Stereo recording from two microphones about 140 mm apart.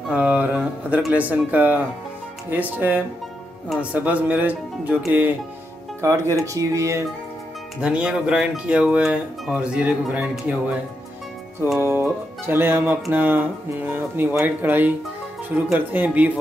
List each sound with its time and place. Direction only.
0.1 s speech: 10° right (ahead or behind)
3.6 s speech: centre (ahead or behind)
3.9 s speech: 10° right (ahead or behind)
7.8 s speech: 10° right (ahead or behind)
11.8 s speech: 15° right (ahead or behind)